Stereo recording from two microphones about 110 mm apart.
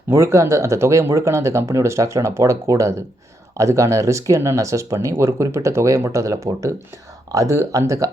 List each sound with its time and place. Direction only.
0.1 s speech: 25° right (ahead or behind)